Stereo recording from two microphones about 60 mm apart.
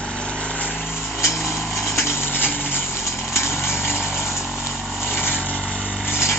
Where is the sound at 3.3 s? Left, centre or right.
Left.